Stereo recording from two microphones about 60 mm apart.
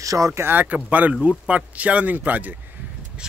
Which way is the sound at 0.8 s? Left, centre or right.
Right.